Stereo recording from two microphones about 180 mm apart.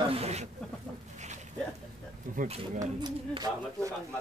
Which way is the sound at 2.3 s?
45° right (ahead or behind).